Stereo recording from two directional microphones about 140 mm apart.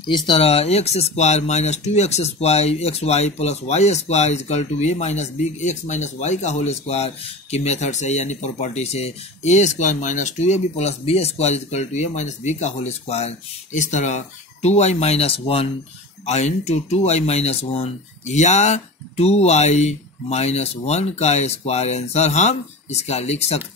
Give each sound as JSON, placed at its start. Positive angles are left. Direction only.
{"t": 0.3, "sound": "speech", "side_deg": 45}